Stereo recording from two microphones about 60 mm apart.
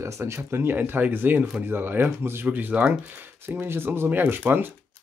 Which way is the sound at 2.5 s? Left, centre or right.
Right.